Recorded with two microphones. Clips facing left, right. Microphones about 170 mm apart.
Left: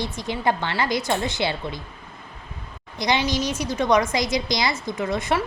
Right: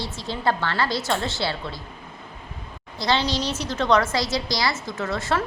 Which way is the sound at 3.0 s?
15° left (ahead or behind).